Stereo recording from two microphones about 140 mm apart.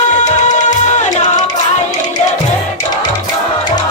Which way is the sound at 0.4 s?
60° left (ahead or behind).